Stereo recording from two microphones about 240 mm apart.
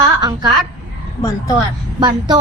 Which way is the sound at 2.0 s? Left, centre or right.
Centre.